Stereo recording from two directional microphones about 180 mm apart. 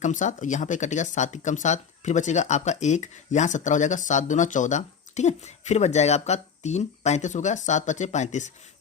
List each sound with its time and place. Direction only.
0.0 s speech: 45° left (ahead or behind)